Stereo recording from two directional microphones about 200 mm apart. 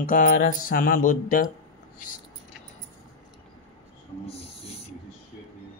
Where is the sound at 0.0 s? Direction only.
45° left (ahead or behind).